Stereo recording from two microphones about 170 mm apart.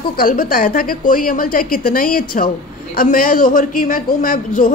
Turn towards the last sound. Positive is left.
turn(degrees=50)  # may be behind; listen again after turning